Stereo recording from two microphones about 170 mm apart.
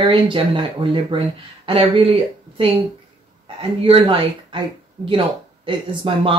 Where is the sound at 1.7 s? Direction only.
30° right (ahead or behind).